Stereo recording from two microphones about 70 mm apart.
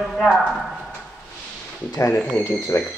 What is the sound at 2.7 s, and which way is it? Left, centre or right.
Speech, left.